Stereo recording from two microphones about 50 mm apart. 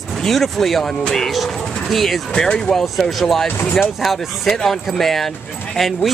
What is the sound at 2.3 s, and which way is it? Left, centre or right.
Speech, centre.